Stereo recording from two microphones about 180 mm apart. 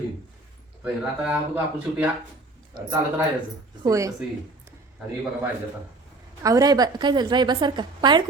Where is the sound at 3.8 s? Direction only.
20° right (ahead or behind).